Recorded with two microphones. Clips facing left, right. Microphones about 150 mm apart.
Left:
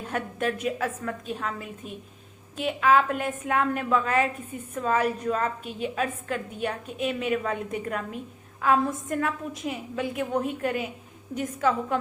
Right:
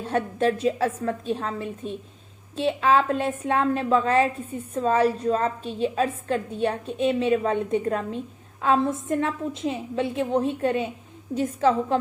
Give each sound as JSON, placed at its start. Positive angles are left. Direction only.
{"t": 0.0, "sound": "a woman's voice", "side_deg": -30}